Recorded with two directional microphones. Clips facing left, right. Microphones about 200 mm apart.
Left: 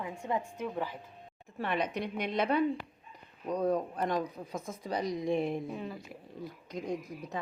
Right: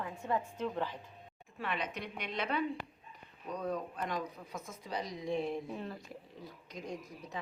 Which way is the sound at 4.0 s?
50° left (ahead or behind).